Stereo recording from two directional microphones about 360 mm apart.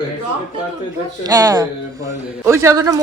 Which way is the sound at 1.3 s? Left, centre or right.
Centre.